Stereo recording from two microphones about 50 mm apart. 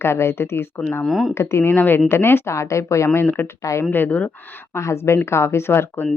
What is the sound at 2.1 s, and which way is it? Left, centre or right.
Speech, left.